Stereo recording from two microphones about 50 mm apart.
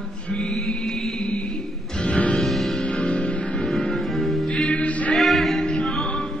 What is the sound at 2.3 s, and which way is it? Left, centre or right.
Music, centre.